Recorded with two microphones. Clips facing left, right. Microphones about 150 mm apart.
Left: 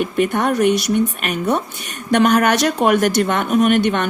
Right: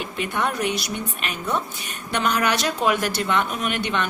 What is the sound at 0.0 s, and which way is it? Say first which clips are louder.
Speech: left 8 dB; 50° left (ahead or behind).